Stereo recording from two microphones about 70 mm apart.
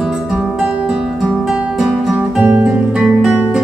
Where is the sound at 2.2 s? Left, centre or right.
Centre.